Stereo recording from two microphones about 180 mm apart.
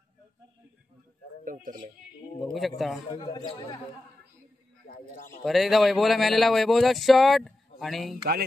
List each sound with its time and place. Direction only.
1.4 s speech: 50° right (ahead or behind)
2.4 s a man's voice: centre (ahead or behind)
3.1 s a man's voice: 20° left (ahead or behind)
4.8 s a man's voice: 50° left (ahead or behind)
5.4 s a man's voice: centre (ahead or behind)